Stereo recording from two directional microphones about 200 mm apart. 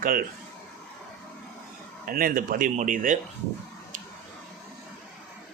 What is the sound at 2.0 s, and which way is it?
Speech, 45° right (ahead or behind).